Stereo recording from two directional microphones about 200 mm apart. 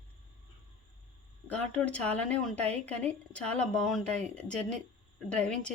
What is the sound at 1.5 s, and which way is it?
A woman's voice, 5° left (ahead or behind).